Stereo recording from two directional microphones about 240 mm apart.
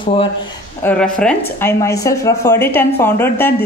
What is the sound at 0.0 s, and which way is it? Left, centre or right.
Speech, left.